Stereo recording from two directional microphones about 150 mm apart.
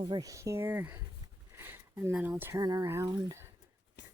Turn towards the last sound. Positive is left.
turn(degrees=-25)  # may be behind; listen again after turning